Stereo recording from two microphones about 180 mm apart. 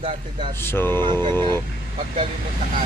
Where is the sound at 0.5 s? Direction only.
15° left (ahead or behind).